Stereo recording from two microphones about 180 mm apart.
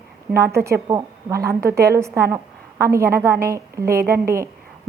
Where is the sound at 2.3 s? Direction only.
15° right (ahead or behind).